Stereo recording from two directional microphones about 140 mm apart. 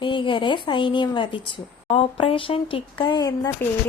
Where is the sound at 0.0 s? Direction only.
35° left (ahead or behind).